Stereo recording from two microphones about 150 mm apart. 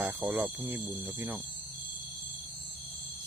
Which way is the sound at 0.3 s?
15° right (ahead or behind).